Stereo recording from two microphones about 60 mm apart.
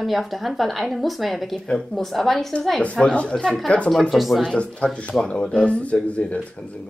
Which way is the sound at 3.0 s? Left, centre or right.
Centre.